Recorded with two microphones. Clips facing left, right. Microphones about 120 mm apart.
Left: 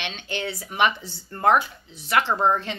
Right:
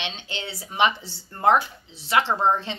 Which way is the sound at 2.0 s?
25° right (ahead or behind).